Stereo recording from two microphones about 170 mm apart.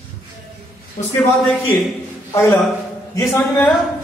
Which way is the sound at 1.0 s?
50° left (ahead or behind).